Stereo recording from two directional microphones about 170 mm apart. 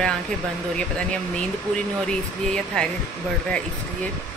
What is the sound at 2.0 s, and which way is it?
Speech, 5° left (ahead or behind).